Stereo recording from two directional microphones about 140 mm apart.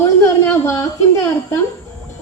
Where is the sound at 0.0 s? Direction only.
20° left (ahead or behind).